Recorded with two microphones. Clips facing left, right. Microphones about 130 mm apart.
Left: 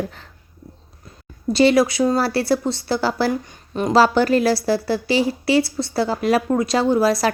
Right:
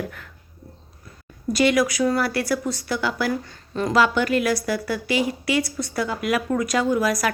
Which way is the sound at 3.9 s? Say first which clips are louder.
Left 5 dB; 35° left (ahead or behind).